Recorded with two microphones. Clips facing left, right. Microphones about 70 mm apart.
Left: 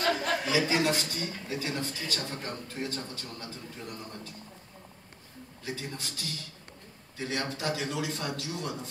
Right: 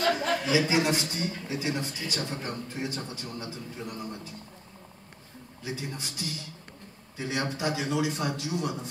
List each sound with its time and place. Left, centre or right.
0.1 s a man's voice: right
5.6 s a man's voice: centre